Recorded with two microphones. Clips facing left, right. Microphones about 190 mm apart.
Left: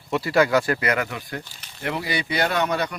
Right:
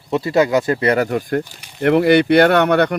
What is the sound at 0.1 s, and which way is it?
Speech, 20° right (ahead or behind).